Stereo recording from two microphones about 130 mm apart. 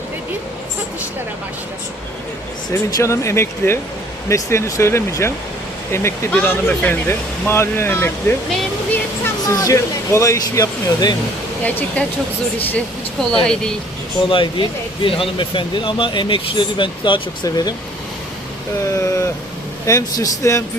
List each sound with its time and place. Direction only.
2.7 s speech: 20° left (ahead or behind)
12.0 s speech: 10° left (ahead or behind)
13.4 s speech: 5° left (ahead or behind)
14.3 s speech: 40° left (ahead or behind)
18.9 s speech: 25° left (ahead or behind)